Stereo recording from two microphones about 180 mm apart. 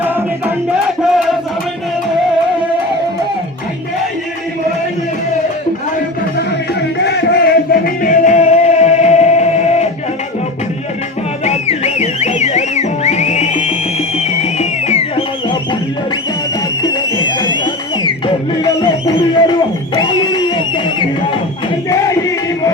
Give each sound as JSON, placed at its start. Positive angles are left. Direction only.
{"t": 1.1, "sound": "battle cry", "side_deg": 0}
{"t": 7.0, "sound": "music", "side_deg": 70}
{"t": 11.4, "sound": "music", "side_deg": 35}
{"t": 16.8, "sound": "a sound", "side_deg": 25}
{"t": 18.6, "sound": "music", "side_deg": 25}